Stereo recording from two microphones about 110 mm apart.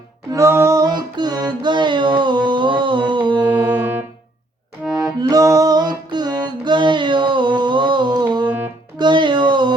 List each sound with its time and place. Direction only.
0.3 s female singing: 25° right (ahead or behind)
0.9 s music: 40° right (ahead or behind)
3.5 s music: 15° right (ahead or behind)
4.8 s accordion: 10° right (ahead or behind)
5.3 s music: 30° right (ahead or behind)
8.4 s music: 15° right (ahead or behind)
9.0 s meow: 45° right (ahead or behind)